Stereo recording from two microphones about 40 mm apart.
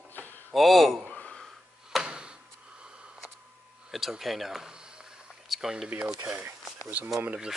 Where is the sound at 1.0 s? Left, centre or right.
Left.